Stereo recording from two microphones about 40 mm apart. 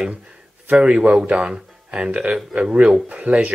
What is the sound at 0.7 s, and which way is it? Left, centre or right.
Speech, right.